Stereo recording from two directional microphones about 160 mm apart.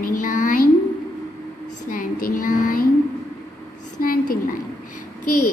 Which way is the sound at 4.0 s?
60° left (ahead or behind).